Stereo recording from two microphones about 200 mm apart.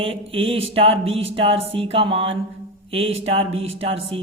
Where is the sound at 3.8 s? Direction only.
30° right (ahead or behind).